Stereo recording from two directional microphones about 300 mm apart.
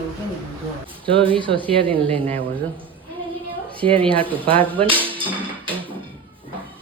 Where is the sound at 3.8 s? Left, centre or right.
Centre.